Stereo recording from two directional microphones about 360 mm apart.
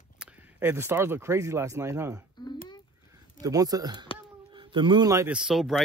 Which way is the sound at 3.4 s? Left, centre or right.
Centre.